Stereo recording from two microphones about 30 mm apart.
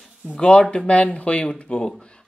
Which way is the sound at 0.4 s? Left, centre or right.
Left.